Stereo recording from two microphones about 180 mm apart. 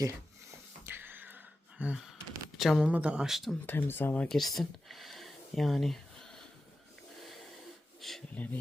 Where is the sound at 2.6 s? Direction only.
Centre (ahead or behind).